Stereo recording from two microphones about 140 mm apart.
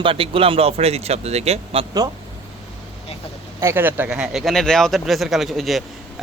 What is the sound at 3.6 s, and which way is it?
Speech, 15° right (ahead or behind).